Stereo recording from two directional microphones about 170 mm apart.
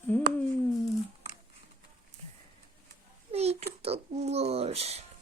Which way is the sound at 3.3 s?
40° right (ahead or behind).